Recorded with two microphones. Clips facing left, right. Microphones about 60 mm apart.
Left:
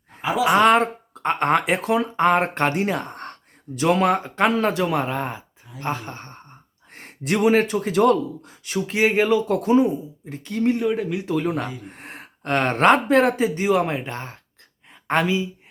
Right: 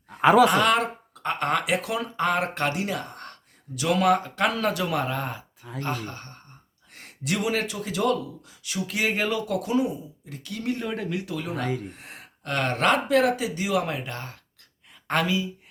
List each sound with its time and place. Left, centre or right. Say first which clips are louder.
0.2 s speech: right 7 dB; right
0.4 s speech: left 5 dB; left
10.8 s speech: left 7 dB; centre
11.2 s speech: left 7 dB; left